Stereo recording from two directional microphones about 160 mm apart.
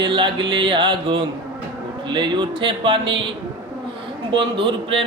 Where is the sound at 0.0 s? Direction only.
30° right (ahead or behind).